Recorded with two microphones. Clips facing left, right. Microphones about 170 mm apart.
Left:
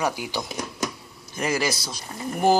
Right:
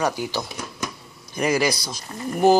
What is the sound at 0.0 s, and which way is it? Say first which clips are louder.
Speech: right 2 dB; 10° left (ahead or behind).